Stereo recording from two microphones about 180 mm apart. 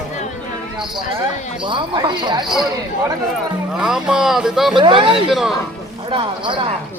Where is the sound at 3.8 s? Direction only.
5° right (ahead or behind).